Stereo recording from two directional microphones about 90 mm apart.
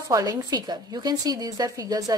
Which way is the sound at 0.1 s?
45° right (ahead or behind).